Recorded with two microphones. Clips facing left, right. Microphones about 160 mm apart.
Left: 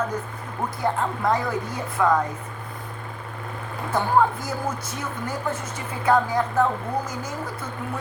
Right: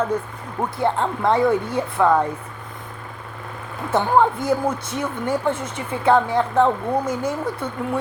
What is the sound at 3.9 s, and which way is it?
A woman's voice, 25° right (ahead or behind).